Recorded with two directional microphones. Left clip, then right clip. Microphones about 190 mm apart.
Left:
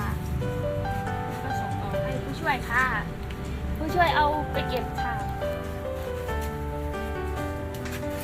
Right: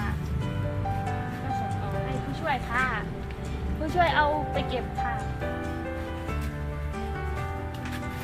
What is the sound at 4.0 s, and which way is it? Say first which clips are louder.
Music: left 1 dB; 5° right (ahead or behind).